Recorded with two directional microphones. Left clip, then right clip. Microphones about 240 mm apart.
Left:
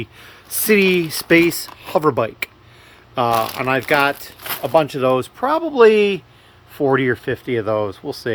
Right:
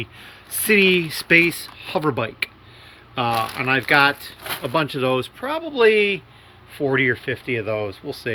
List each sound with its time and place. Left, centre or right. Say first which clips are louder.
0.0 s speech: left 1 dB; left